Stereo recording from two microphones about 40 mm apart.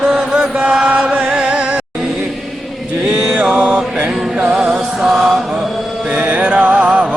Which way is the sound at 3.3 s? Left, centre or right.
Right.